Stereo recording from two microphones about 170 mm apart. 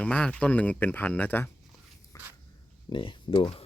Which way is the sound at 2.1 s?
20° left (ahead or behind).